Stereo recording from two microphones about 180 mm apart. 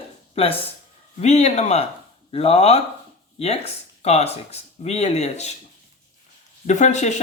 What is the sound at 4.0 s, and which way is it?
Speech, 35° left (ahead or behind).